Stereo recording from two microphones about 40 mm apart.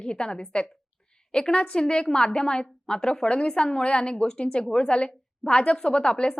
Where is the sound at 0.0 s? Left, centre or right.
Left.